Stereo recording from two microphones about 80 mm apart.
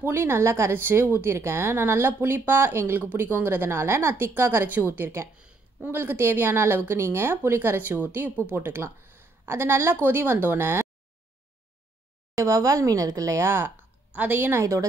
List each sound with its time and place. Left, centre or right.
0.0 s a woman's voice: right
12.4 s a woman's voice: right
14.1 s a woman's voice: right